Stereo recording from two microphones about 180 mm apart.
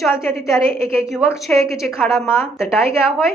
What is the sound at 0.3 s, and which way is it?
Speech, 15° left (ahead or behind).